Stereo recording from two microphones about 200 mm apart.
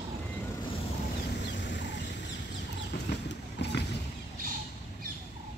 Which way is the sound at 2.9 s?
55° left (ahead or behind).